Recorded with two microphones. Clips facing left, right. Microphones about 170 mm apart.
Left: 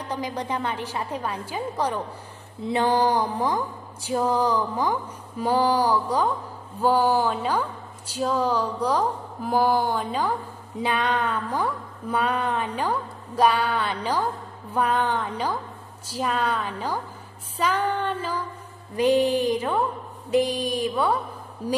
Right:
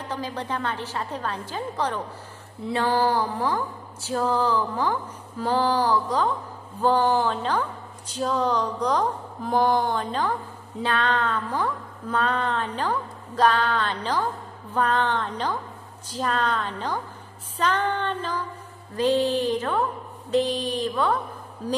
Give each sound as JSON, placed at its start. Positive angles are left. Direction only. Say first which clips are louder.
{"t": 0.1, "sound": "speech", "louder": "left 2 dB", "side_deg": 15}